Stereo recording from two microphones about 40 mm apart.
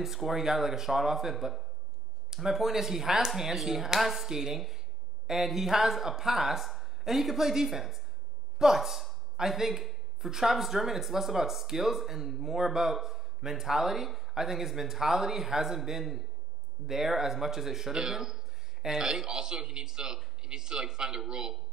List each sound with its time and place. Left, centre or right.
0.0 s a man's voice: centre